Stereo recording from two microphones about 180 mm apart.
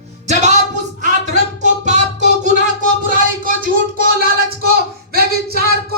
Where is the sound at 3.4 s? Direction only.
50° right (ahead or behind).